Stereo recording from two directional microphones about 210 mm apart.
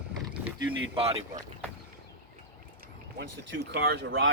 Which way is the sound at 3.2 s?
55° right (ahead or behind).